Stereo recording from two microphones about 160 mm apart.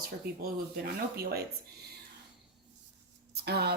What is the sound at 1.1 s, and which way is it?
Speech, 75° right (ahead or behind).